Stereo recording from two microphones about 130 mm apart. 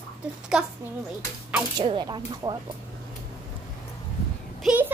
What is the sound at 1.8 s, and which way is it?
Speech, 35° right (ahead or behind).